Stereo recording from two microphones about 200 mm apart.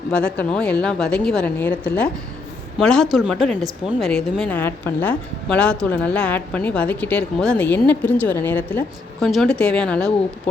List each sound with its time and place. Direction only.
0.1 s a woman's voice: 5° left (ahead or behind)